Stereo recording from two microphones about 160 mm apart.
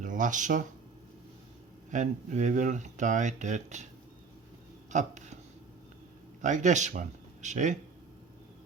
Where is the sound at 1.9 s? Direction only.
50° right (ahead or behind).